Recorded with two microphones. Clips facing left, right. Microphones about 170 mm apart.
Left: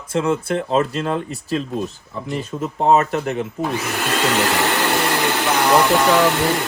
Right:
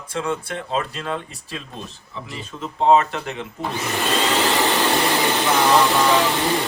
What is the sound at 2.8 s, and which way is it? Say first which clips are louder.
Speech: even; 45° left (ahead or behind).